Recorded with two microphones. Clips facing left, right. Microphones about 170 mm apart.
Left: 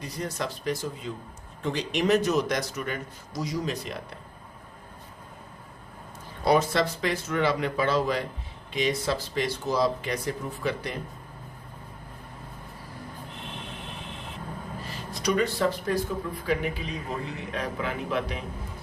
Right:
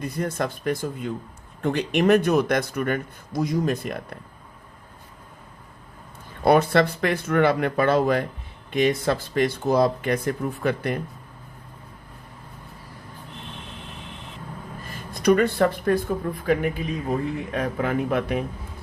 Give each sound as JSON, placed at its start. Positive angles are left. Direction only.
{"t": 0.0, "sound": "speech", "side_deg": -55}
{"t": 6.4, "sound": "speech", "side_deg": -60}
{"t": 14.8, "sound": "speech", "side_deg": -50}